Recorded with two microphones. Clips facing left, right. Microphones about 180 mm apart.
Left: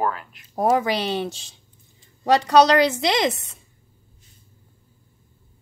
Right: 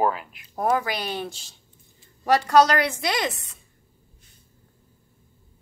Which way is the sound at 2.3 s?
20° left (ahead or behind).